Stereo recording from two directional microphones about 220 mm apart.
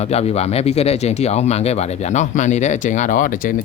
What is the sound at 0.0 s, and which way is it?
Speech, 30° left (ahead or behind).